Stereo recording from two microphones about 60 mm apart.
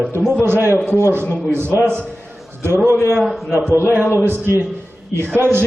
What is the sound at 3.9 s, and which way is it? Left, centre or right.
Speech, right.